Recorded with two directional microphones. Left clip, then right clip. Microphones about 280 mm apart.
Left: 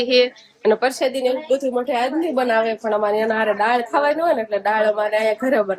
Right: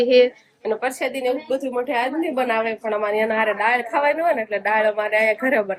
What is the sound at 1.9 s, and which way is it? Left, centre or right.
A woman's voice, centre.